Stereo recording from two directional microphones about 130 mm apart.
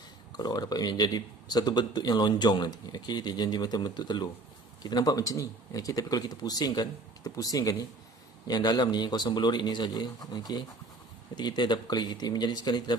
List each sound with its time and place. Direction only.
0.4 s speech: 30° left (ahead or behind)